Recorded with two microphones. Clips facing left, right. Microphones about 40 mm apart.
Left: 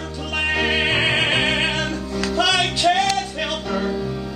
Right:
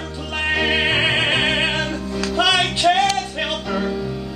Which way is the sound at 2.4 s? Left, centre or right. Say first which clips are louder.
Right 2 dB; centre.